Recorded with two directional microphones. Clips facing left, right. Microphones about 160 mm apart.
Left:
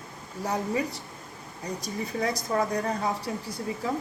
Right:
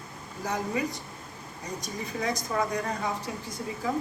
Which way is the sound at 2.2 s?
35° left (ahead or behind).